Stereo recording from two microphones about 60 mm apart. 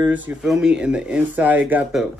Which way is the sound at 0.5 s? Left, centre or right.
Centre.